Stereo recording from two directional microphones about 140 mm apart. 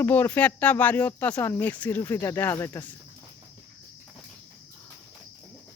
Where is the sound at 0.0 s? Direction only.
15° left (ahead or behind).